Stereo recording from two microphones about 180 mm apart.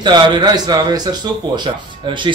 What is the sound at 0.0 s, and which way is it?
Speech, 25° right (ahead or behind).